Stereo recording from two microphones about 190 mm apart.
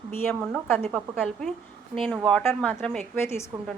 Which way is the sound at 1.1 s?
Centre (ahead or behind).